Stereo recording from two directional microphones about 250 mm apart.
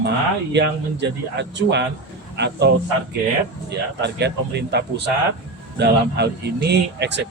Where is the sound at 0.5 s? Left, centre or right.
Right.